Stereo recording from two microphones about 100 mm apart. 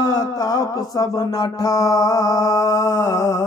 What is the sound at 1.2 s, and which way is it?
Mantra, 35° left (ahead or behind).